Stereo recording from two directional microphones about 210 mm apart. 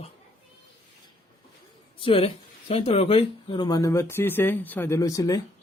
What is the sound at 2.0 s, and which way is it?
Speech, 25° left (ahead or behind).